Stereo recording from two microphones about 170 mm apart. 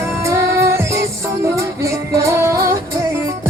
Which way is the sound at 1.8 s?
20° right (ahead or behind).